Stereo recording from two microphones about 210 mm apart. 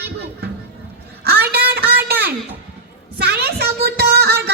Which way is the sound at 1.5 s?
50° right (ahead or behind).